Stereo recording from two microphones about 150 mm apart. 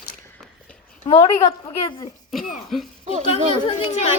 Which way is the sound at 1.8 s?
25° left (ahead or behind).